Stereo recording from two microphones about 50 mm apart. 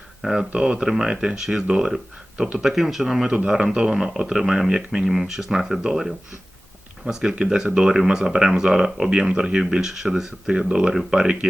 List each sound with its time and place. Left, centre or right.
0.3 s speech: centre
3.3 s speech: centre